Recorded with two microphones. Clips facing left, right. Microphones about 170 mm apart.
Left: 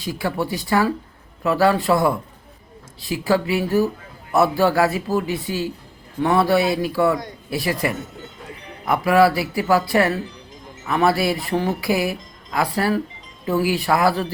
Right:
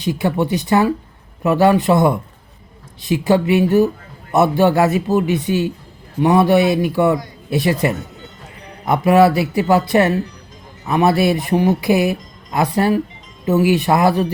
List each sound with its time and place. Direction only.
0.0 s speech: 20° right (ahead or behind)